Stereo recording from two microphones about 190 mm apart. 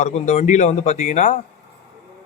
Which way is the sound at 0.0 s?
35° left (ahead or behind).